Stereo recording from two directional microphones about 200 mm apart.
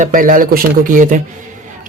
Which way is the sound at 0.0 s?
40° right (ahead or behind).